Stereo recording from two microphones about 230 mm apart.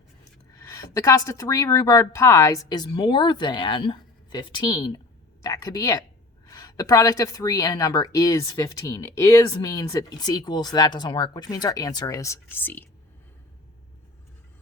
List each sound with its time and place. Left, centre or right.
0.6 s a woman's voice: centre